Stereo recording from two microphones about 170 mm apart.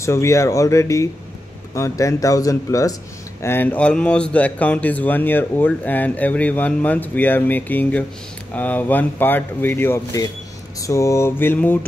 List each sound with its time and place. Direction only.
0.0 s speech: 15° left (ahead or behind)